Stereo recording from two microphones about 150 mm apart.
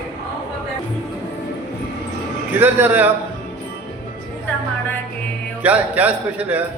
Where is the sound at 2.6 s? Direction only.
10° right (ahead or behind).